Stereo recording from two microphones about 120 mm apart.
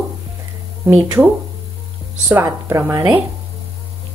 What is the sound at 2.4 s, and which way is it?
Speech, 20° right (ahead or behind).